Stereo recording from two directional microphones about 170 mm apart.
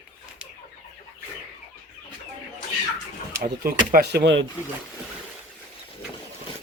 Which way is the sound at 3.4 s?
60° right (ahead or behind).